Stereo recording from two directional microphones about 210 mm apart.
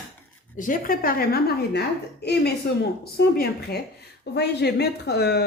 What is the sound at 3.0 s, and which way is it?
Speech, 50° left (ahead or behind).